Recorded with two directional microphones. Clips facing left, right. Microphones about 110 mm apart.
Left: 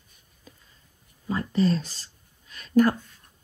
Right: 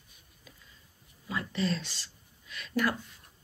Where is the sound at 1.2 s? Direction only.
40° left (ahead or behind).